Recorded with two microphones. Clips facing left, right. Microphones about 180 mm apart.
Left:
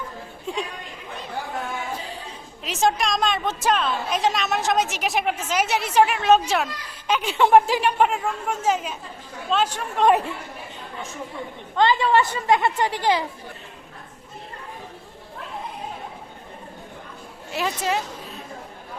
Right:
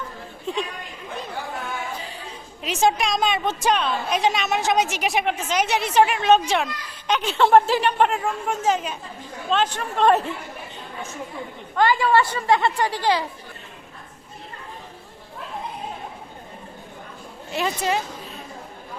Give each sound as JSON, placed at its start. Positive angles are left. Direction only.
{"t": 2.6, "sound": "a woman's voice", "side_deg": 0}
{"t": 11.8, "sound": "a child's voice", "side_deg": 20}
{"t": 17.5, "sound": "a woman's voice", "side_deg": 0}